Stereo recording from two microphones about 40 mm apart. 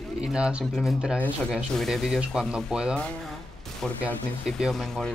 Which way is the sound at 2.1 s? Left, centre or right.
Right.